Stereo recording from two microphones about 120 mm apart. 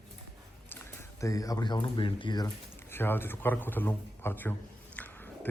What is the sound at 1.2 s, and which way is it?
A man's voice, 30° left (ahead or behind).